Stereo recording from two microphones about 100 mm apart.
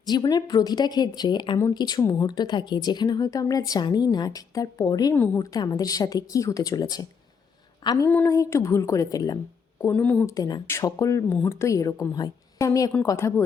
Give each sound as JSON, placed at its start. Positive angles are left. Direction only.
{"t": 0.1, "sound": "speech", "side_deg": 45}
{"t": 2.0, "sound": "a woman's voice", "side_deg": 30}
{"t": 2.2, "sound": "speech", "side_deg": 45}
{"t": 5.1, "sound": "a woman's voice", "side_deg": 20}
{"t": 5.5, "sound": "speech", "side_deg": 35}
{"t": 8.0, "sound": "a woman's voice", "side_deg": 20}
{"t": 9.8, "sound": "speech", "side_deg": 20}
{"t": 10.2, "sound": "a woman's voice", "side_deg": 35}